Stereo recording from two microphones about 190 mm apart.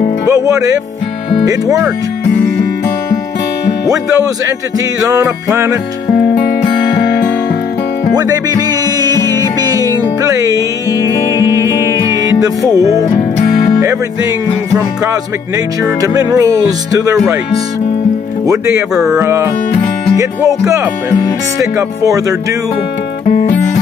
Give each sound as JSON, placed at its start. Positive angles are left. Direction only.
{"t": 0.3, "sound": "speech", "side_deg": -15}
{"t": 4.7, "sound": "speech", "side_deg": -15}
{"t": 8.1, "sound": "music", "side_deg": -20}
{"t": 15.5, "sound": "speech", "side_deg": -15}
{"t": 18.5, "sound": "speech", "side_deg": -15}
{"t": 23.2, "sound": "music", "side_deg": 40}